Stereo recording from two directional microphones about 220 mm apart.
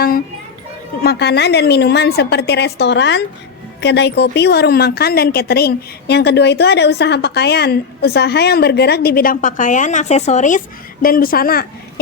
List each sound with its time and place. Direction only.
1.0 s a woman's voice: 50° left (ahead or behind)